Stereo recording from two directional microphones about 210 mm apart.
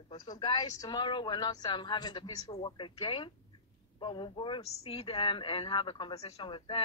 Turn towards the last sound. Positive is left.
turn(degrees=25)  # may be behind; listen again after turning